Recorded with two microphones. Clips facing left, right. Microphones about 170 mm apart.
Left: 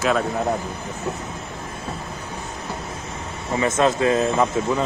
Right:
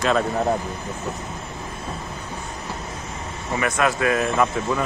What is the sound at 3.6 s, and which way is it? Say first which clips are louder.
Speech: left 3 dB; 25° left (ahead or behind).